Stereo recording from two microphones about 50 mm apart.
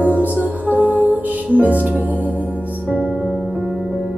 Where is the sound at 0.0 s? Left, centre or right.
Right.